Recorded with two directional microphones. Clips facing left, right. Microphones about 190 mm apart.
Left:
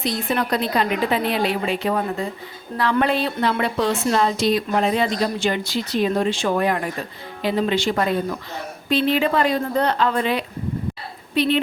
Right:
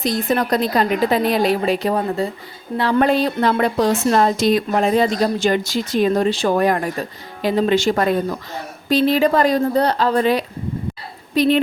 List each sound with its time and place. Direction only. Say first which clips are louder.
0.0 s a woman's voice: right 4 dB; 40° right (ahead or behind)
3.0 s a woman's voice: right 5 dB; 40° right (ahead or behind)